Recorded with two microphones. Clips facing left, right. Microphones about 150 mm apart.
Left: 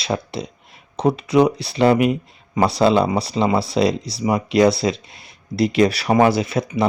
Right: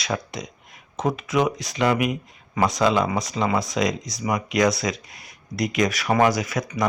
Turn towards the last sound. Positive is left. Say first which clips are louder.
# left 5 dB
turn(degrees=30)  # may be behind; listen again after turning